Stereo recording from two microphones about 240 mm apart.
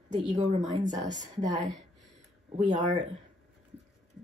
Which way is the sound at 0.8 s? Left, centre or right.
Right.